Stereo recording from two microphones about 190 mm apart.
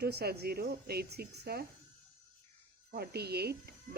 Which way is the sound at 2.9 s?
55° right (ahead or behind).